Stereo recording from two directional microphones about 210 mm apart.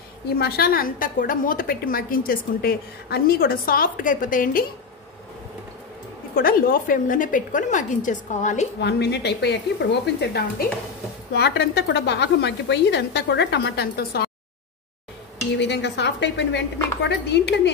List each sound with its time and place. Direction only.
0.4 s a woman's voice: 50° left (ahead or behind)
6.3 s a woman's voice: 45° left (ahead or behind)
8.7 s a woman's voice: 55° left (ahead or behind)
15.5 s a woman's voice: 55° left (ahead or behind)